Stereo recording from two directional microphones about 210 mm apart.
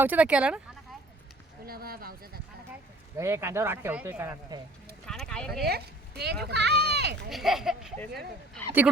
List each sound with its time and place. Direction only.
0.0 s speech: 5° right (ahead or behind)
1.6 s a sound: 45° right (ahead or behind)
3.2 s speech: 10° right (ahead or behind)
5.0 s clip-clop: 5° left (ahead or behind)
5.6 s speech: 50° right (ahead or behind)
7.3 s speech: centre (ahead or behind)